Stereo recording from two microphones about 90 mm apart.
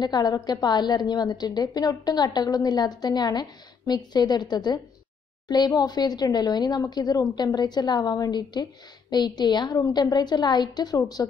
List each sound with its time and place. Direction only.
0.0 s a woman's voice: 50° left (ahead or behind)
9.8 s a woman's voice: 40° left (ahead or behind)